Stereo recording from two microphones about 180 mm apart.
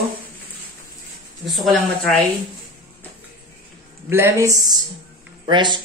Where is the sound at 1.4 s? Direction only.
Centre (ahead or behind).